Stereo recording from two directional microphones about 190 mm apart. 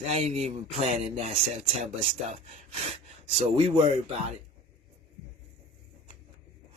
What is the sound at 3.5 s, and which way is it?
Speech, 30° right (ahead or behind).